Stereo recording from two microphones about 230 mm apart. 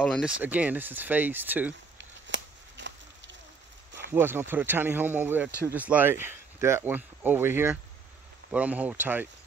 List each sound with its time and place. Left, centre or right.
0.0 s speech: centre
2.0 s a sound: right
4.1 s speech: centre